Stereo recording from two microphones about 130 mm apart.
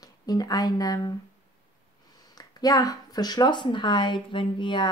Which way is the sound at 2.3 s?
25° left (ahead or behind).